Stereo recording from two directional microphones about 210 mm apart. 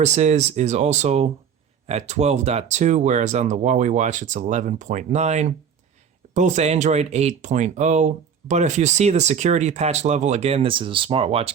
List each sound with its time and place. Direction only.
0.0 s speech: 35° right (ahead or behind)